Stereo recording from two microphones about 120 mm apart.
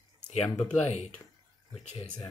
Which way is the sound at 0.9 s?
65° left (ahead or behind).